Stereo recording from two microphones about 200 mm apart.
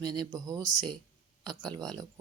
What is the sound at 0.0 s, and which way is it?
Speech, 20° right (ahead or behind).